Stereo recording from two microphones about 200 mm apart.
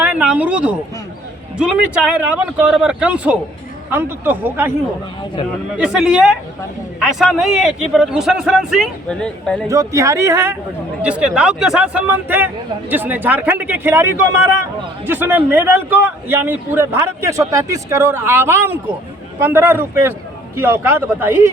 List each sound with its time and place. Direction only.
0.0 s speech: 5° right (ahead or behind)
2.1 s a man's voice: 10° right (ahead or behind)
5.7 s a man's voice: 5° right (ahead or behind)
9.6 s a man's voice: 15° right (ahead or behind)